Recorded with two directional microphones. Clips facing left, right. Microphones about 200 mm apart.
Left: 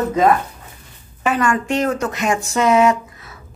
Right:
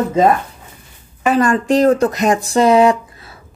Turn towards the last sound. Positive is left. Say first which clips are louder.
# right 3 dB
turn(degrees=-30)  # may be behind; listen again after turning